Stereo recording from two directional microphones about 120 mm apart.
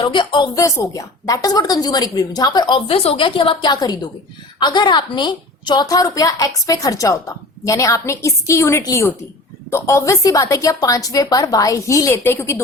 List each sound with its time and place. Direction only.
0.0 s a woman's voice: 40° left (ahead or behind)
0.5 s a woman's voice: 25° left (ahead or behind)